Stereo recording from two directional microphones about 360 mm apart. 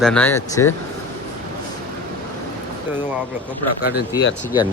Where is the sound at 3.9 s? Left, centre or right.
Left.